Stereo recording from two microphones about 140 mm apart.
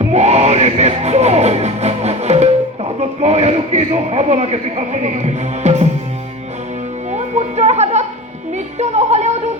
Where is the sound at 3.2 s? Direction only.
50° right (ahead or behind).